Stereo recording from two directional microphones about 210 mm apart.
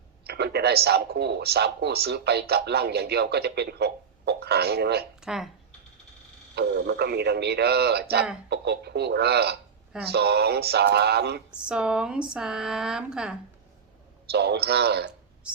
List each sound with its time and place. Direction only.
0.3 s speech: 50° right (ahead or behind)
5.2 s speech: centre (ahead or behind)
6.6 s speech: 50° right (ahead or behind)
11.5 s speech: 5° right (ahead or behind)
14.3 s speech: 50° right (ahead or behind)